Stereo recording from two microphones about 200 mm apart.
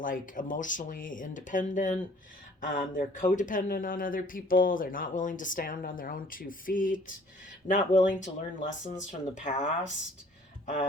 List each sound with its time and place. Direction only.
0.0 s speech: 45° left (ahead or behind)